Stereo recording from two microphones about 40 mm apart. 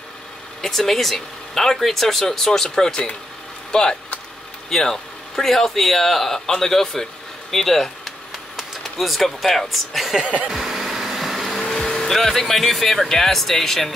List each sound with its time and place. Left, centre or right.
0.6 s speech: centre
10.5 s vehicle: centre
11.6 s speech: centre